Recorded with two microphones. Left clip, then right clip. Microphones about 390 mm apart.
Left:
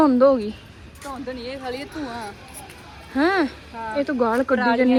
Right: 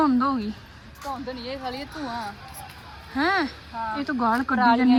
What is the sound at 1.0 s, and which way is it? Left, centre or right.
Speech, right.